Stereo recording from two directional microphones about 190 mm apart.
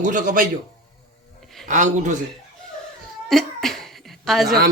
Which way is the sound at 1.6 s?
40° right (ahead or behind).